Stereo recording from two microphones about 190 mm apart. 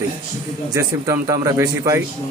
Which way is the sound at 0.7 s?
15° right (ahead or behind).